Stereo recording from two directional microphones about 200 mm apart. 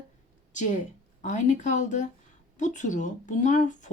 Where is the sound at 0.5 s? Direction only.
40° left (ahead or behind).